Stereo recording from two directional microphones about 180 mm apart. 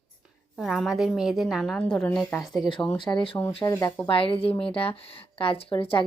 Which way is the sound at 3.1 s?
30° left (ahead or behind).